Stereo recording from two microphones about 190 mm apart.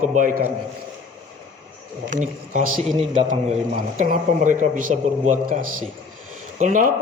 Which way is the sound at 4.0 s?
45° right (ahead or behind).